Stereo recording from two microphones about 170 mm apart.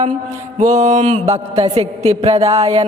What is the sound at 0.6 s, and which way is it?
Music, 45° right (ahead or behind).